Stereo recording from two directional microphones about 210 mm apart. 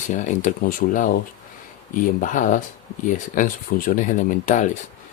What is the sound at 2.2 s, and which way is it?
Speech, 40° left (ahead or behind).